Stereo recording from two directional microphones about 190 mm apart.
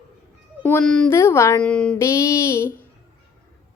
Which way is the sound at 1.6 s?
5° left (ahead or behind).